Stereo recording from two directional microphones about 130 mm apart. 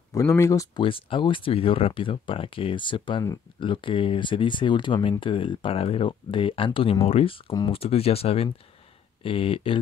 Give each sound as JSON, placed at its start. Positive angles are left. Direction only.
{"t": 0.1, "sound": "speech", "side_deg": 25}
{"t": 0.7, "sound": "speech", "side_deg": 40}